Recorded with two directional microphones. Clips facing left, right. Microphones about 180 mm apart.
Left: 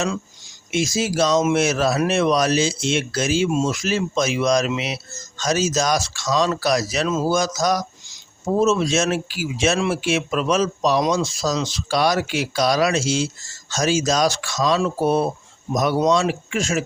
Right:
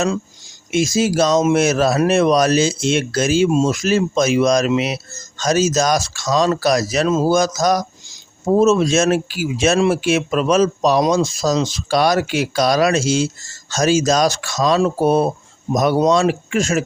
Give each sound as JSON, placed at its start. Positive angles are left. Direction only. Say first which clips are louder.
{"t": 0.7, "sound": "speech", "louder": "right 5 dB", "side_deg": -45}